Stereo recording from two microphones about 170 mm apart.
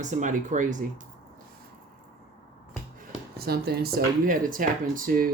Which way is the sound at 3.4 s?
65° right (ahead or behind).